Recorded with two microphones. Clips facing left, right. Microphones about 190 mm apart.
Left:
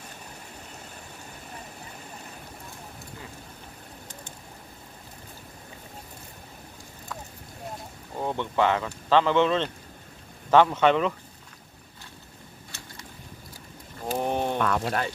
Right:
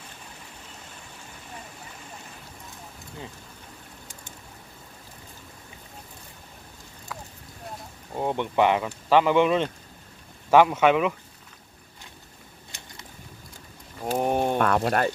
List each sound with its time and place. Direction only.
8.2 s speech: 15° right (ahead or behind)
12.7 s boat: 15° right (ahead or behind)
14.2 s a sound: 10° right (ahead or behind)
14.6 s speech: 50° right (ahead or behind)